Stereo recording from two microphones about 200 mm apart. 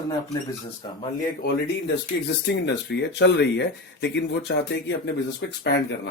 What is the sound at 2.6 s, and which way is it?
Speech, 60° left (ahead or behind).